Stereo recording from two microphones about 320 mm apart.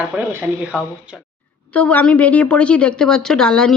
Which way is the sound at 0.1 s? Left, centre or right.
Centre.